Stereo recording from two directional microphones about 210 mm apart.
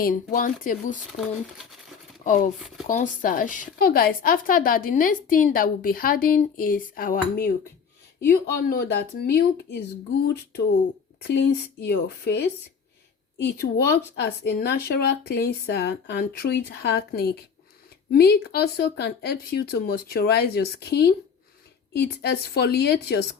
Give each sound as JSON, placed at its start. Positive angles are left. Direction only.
{"t": 0.0, "sound": "speech", "side_deg": 40}
{"t": 2.8, "sound": "a woman's voice", "side_deg": 40}